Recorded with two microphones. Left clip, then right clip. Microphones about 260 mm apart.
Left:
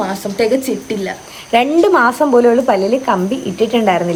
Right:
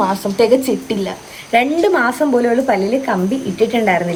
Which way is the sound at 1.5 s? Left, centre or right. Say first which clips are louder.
Left 2 dB; centre.